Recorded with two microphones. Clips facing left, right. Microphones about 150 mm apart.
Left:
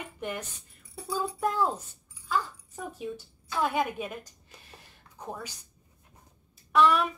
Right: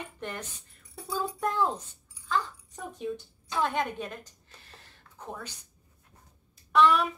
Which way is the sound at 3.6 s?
5° left (ahead or behind).